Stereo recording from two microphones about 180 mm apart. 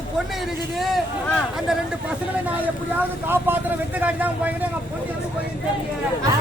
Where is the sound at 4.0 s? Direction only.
10° right (ahead or behind).